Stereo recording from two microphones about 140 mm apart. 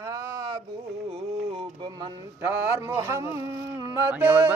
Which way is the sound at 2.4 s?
15° right (ahead or behind).